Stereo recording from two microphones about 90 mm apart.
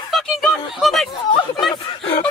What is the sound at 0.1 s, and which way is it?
Speech, centre (ahead or behind).